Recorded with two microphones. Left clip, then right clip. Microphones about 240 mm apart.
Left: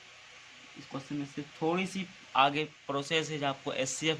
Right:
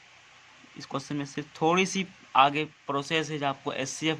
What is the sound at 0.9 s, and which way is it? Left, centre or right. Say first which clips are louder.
A man's voice: right 5 dB; right.